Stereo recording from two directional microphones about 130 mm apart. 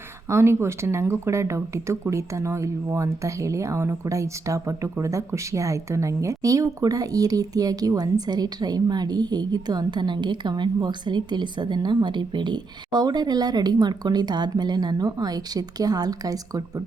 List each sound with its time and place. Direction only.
0.3 s speech: 20° right (ahead or behind)